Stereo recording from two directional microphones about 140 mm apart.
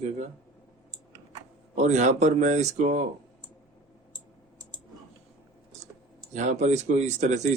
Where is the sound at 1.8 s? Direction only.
55° right (ahead or behind).